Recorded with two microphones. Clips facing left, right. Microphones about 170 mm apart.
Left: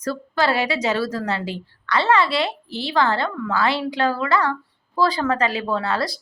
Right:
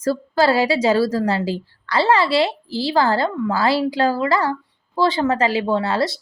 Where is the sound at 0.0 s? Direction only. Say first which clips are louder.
Right 5 dB; 35° right (ahead or behind).